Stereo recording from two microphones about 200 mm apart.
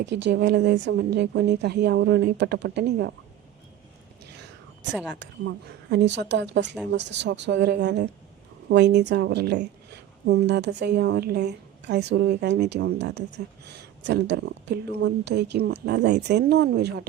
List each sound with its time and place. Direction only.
0.0 s a woman's voice: 60° right (ahead or behind)
5.9 s a woman's voice: 60° right (ahead or behind)